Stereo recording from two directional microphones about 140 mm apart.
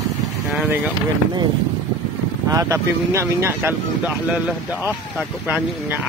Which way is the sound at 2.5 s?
25° right (ahead or behind).